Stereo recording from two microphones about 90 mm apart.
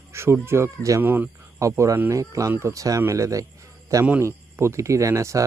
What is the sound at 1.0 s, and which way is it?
Speech, 20° right (ahead or behind).